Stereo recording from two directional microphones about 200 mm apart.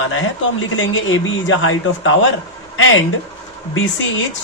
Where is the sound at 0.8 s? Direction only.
75° left (ahead or behind).